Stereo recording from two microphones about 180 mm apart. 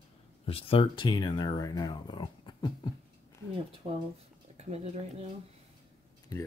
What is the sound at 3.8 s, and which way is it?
Speech, 35° right (ahead or behind).